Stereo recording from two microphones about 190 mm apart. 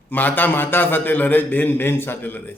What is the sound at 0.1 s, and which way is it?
A man's voice, 10° left (ahead or behind).